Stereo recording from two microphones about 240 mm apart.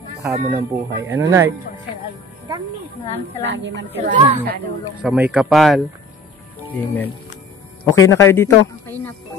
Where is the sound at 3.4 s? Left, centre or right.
Right.